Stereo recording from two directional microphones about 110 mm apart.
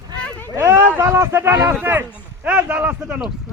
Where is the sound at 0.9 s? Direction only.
25° right (ahead or behind).